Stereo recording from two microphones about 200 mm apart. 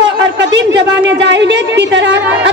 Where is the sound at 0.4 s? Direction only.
65° right (ahead or behind).